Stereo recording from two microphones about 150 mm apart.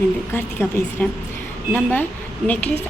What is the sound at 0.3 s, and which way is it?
A woman's voice, 15° left (ahead or behind).